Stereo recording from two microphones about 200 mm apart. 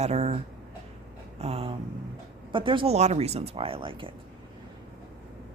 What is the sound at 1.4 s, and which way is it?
A woman's voice, 30° right (ahead or behind).